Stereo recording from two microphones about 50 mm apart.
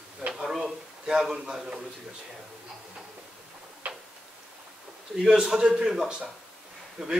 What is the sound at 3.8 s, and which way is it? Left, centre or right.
Tick-tock, right.